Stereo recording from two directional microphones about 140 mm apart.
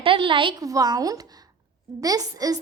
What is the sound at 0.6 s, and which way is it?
A woman's voice, 25° right (ahead or behind).